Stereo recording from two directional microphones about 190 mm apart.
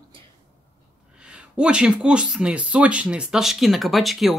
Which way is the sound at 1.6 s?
5° right (ahead or behind).